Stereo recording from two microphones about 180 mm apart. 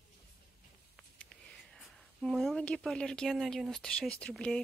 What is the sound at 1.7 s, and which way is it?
A woman's voice, centre (ahead or behind).